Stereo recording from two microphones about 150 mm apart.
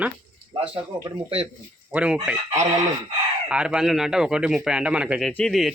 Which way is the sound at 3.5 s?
5° right (ahead or behind).